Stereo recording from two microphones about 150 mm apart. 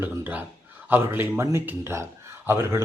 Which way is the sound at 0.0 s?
10° right (ahead or behind).